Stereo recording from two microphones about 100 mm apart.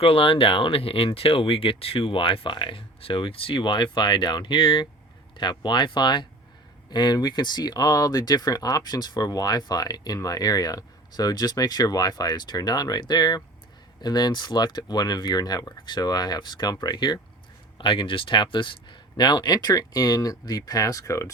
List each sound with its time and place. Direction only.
0.0 s speech: 70° left (ahead or behind); by 17.2 s 45° left (ahead or behind)
17.7 s speech: 55° left (ahead or behind); by 21.2 s 30° left (ahead or behind)